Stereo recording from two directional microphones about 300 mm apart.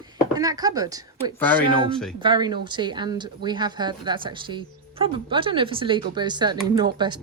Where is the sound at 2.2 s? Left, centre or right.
Centre.